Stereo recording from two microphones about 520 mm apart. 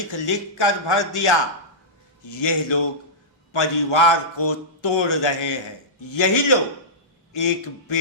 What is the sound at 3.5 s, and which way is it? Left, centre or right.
A man's voice, left.